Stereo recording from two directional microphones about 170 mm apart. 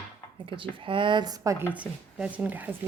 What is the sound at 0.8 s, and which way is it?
Speech, 30° right (ahead or behind).